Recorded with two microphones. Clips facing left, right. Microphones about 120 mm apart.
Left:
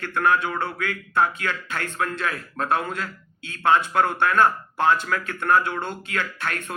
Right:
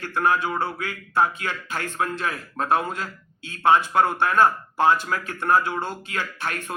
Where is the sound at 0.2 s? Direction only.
30° right (ahead or behind).